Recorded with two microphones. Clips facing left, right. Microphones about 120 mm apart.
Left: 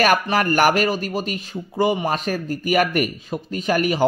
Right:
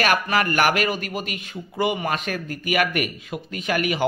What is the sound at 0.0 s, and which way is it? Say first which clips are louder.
Speech: left 3 dB; 40° left (ahead or behind).